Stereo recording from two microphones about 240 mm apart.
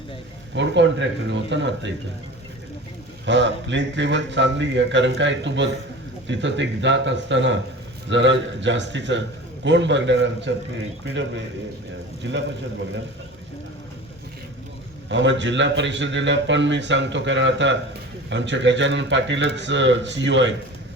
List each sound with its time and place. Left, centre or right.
0.5 s a man's voice: right
3.2 s a man's voice: right
15.1 s a man's voice: right